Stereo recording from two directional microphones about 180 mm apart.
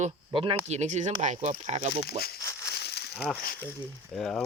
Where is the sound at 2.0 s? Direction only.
60° left (ahead or behind).